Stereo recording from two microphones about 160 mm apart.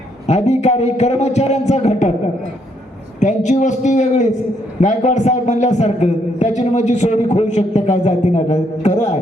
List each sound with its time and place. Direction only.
0.3 s a man's voice: 45° left (ahead or behind)
3.2 s a man's voice: 50° left (ahead or behind)